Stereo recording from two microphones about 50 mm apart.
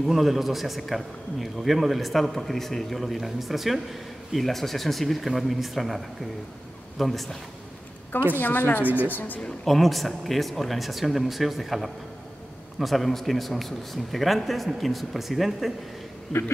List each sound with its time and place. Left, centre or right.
0.0 s a man's voice: centre
8.4 s a woman's voice: left
8.8 s a woman's voice: right
9.1 s a woman's voice: left
9.7 s a man's voice: centre